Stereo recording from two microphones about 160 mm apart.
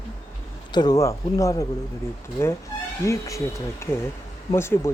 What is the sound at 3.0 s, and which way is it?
Speech, 20° left (ahead or behind).